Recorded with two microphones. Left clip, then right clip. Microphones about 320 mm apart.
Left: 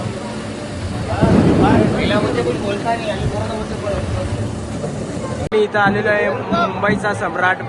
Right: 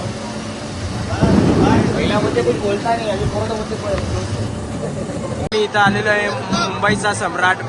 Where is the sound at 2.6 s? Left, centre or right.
Right.